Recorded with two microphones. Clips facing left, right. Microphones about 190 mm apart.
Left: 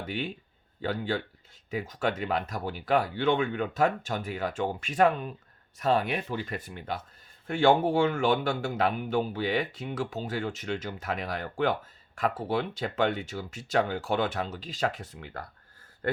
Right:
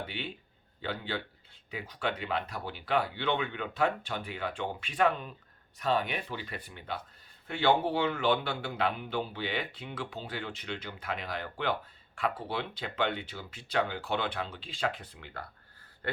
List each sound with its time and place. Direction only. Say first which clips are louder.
0.0 s a man's voice: left 5 dB; 45° left (ahead or behind)